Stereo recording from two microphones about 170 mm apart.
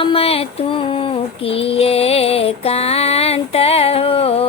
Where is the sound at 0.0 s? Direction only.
35° left (ahead or behind).